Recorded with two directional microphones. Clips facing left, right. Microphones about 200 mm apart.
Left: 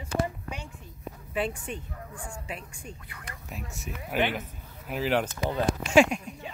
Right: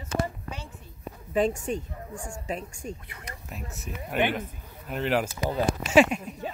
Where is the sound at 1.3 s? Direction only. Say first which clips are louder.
Right 6 dB; 40° right (ahead or behind).